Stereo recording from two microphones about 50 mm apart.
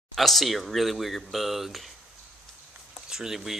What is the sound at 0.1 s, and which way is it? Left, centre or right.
Speech, centre.